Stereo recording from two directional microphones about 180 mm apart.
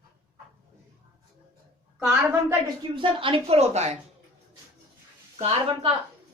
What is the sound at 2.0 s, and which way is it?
Speech, 10° right (ahead or behind).